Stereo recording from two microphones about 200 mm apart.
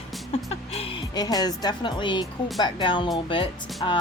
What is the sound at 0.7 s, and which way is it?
Speech, 25° left (ahead or behind).